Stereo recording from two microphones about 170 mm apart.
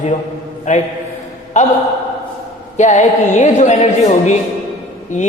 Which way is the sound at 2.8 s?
45° left (ahead or behind).